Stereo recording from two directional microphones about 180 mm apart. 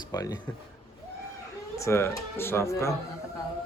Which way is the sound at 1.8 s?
15° left (ahead or behind).